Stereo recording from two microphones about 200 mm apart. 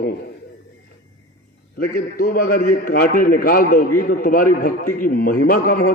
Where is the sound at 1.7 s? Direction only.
50° left (ahead or behind).